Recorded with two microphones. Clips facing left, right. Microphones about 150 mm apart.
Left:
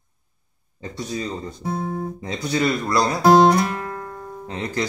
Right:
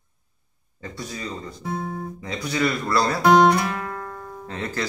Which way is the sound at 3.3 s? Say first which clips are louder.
Left 2 dB; 35° left (ahead or behind).